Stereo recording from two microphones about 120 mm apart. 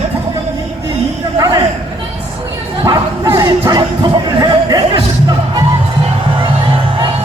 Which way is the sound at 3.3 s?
30° right (ahead or behind).